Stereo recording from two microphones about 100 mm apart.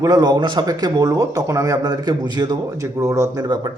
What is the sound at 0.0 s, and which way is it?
Speech, 40° right (ahead or behind).